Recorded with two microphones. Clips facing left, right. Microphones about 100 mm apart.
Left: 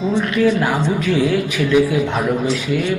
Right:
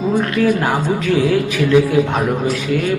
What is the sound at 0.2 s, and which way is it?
Speech, 45° right (ahead or behind).